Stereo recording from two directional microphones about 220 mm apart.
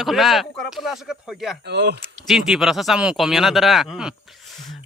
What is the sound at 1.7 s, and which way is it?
Speech, 50° right (ahead or behind).